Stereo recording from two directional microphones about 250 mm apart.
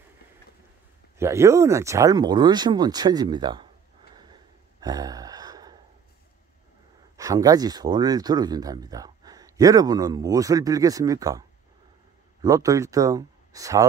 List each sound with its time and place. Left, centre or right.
1.1 s speech: centre
4.1 s a sound: centre
7.2 s speech: centre